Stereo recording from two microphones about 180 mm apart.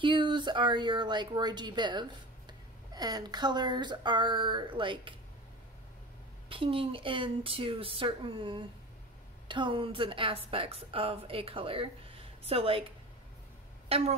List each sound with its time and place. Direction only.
0.0 s speech: 25° right (ahead or behind)
6.5 s a woman's voice: 30° right (ahead or behind)
13.8 s speech: 35° right (ahead or behind)